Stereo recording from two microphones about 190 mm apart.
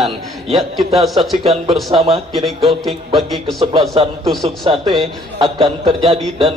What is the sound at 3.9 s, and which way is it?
A man's voice, 30° right (ahead or behind).